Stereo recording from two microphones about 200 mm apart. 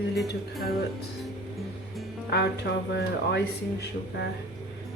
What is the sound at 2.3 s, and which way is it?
Speech, 55° left (ahead or behind).